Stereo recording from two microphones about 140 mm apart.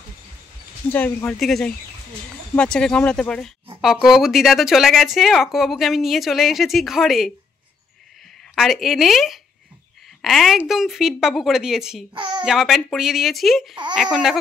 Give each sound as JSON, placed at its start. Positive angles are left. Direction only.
{"t": 0.9, "sound": "speech", "side_deg": 10}
{"t": 1.4, "sound": "speech", "side_deg": 0}
{"t": 8.5, "sound": "speech", "side_deg": 0}
{"t": 12.1, "sound": "a child's voice", "side_deg": -35}
{"t": 12.4, "sound": "speech", "side_deg": 0}